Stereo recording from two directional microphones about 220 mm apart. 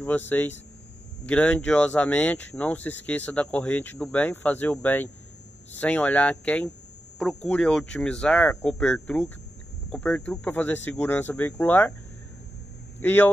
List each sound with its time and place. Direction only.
0.0 s speech: 10° left (ahead or behind)
13.0 s speech: 10° left (ahead or behind)